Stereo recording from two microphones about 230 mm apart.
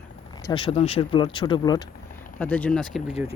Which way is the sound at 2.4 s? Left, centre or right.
Centre.